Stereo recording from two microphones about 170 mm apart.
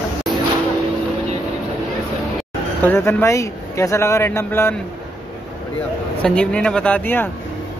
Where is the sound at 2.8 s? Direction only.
10° left (ahead or behind).